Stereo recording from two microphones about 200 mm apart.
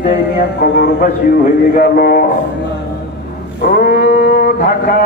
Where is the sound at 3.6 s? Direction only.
50° left (ahead or behind).